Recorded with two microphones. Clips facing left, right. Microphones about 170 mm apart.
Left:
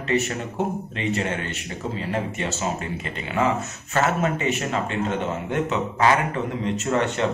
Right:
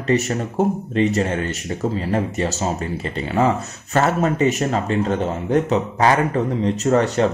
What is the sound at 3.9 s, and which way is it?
Speech, 40° right (ahead or behind).